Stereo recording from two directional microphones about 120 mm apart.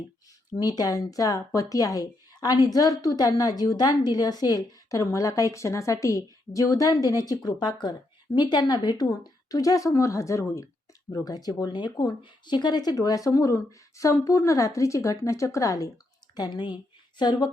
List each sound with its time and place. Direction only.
0.5 s speech: 30° left (ahead or behind)
16.3 s a woman's voice: 40° left (ahead or behind)